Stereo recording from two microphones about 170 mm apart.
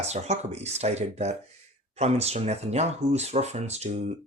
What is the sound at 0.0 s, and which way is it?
Speech, 40° right (ahead or behind).